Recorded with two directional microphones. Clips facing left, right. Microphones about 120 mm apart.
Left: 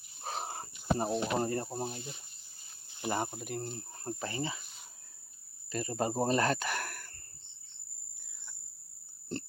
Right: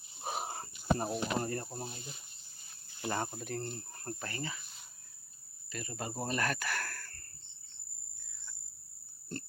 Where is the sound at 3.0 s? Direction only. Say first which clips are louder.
Left 2 dB; 15° left (ahead or behind).